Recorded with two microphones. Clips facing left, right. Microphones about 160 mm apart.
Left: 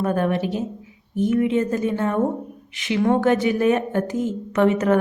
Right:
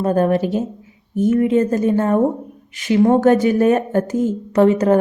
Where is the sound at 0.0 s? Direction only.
35° right (ahead or behind).